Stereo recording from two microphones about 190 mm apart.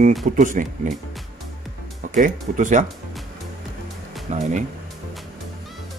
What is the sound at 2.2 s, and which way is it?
Speech, 45° right (ahead or behind).